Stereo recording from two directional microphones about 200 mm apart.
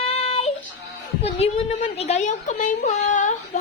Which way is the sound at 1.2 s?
30° left (ahead or behind).